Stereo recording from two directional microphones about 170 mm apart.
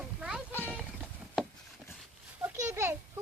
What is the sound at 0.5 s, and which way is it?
Clip-clop, 10° left (ahead or behind).